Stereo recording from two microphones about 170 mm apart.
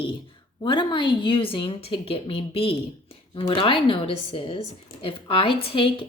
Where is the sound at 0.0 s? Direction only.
30° left (ahead or behind).